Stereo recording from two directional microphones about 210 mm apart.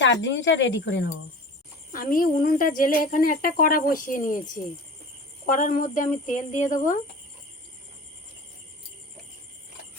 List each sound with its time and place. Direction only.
0.0 s speech: 60° left (ahead or behind)
1.9 s a woman's voice: 40° left (ahead or behind)